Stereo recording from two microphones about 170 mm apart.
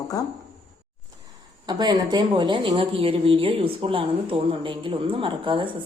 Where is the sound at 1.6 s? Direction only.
25° right (ahead or behind).